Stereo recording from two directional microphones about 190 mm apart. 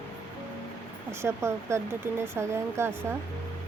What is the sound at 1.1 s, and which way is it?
Speech, 15° right (ahead or behind).